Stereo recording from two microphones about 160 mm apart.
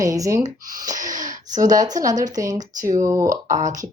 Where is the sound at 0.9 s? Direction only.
55° right (ahead or behind).